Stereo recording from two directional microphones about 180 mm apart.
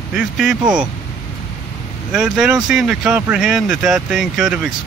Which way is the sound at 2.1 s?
5° right (ahead or behind).